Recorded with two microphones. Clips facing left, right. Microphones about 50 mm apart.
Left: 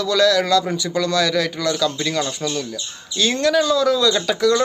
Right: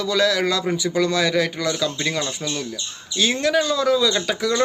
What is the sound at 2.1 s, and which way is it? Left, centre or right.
Speech, centre.